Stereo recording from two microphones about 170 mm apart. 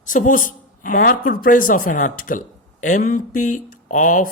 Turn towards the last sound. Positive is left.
turn(degrees=50)  # may be behind; listen again after turning